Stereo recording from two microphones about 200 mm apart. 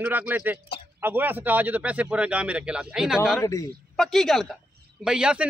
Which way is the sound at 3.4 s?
15° left (ahead or behind).